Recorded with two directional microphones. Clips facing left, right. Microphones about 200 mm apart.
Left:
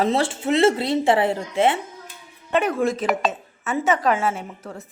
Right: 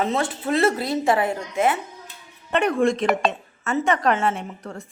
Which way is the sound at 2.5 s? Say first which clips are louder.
Right 1 dB; centre (ahead or behind).